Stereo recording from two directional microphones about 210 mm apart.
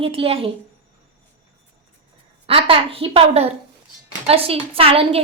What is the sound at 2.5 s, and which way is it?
A woman's voice, 25° right (ahead or behind).